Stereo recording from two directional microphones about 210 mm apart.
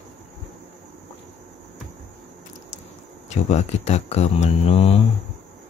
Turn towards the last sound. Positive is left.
turn(degrees=30)  # may be behind; listen again after turning